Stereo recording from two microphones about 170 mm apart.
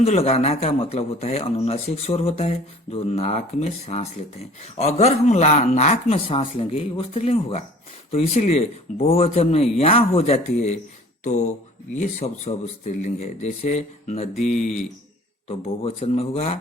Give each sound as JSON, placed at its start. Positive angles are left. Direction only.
{"t": 0.0, "sound": "a man's voice", "side_deg": 40}